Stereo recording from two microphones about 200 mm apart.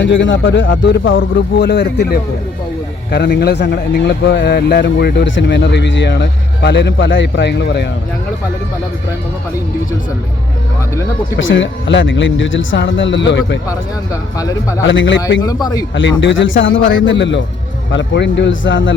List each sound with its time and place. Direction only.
0.0 s a man's voice: 65° left (ahead or behind)
11.3 s a man's voice: 70° left (ahead or behind)
13.7 s speech: 15° left (ahead or behind)
14.8 s a man's voice: 65° left (ahead or behind)
15.6 s speech: 20° left (ahead or behind)
16.0 s a man's voice: 70° left (ahead or behind)